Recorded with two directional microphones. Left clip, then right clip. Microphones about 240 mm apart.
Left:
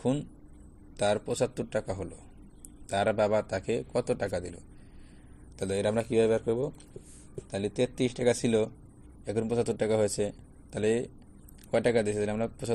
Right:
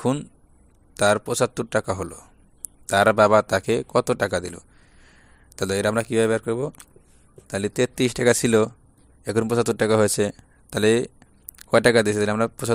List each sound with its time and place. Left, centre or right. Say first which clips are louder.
0.0 s a man's voice: right 6 dB; right